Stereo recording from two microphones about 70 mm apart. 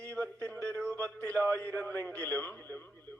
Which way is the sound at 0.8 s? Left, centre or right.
Centre.